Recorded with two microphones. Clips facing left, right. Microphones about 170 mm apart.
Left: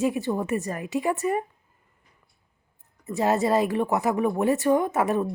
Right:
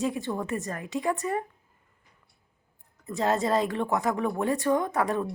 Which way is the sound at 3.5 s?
15° left (ahead or behind).